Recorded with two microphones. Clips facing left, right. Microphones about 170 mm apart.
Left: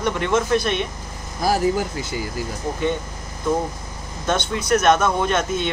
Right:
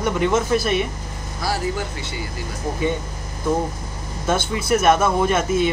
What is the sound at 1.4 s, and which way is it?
Speech, 40° left (ahead or behind).